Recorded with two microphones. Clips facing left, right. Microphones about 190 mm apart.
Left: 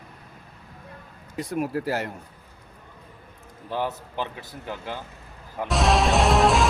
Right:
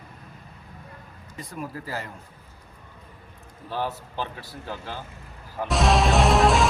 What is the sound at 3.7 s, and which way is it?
A man's voice, 15° left (ahead or behind).